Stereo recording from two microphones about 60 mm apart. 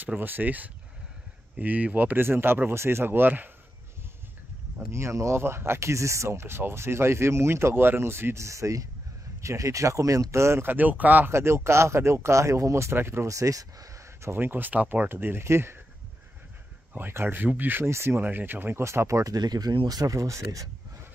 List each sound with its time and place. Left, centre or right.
0.0 s speech: right
4.9 s speech: right
8.5 s speech: right
10.7 s speech: right
11.3 s speech: right
13.3 s speech: right
14.2 s speech: right
17.1 s speech: right
17.8 s speech: right
18.2 s speech: right
18.9 s speech: right